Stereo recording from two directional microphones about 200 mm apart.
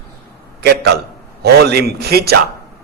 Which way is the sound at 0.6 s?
55° right (ahead or behind).